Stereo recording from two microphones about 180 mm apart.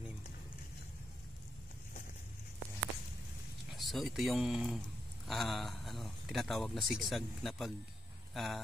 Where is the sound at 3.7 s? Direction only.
Centre (ahead or behind).